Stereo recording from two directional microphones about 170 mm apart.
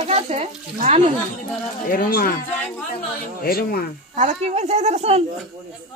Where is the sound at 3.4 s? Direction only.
60° left (ahead or behind).